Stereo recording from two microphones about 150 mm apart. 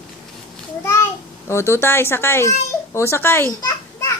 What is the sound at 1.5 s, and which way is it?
Speech, 15° left (ahead or behind).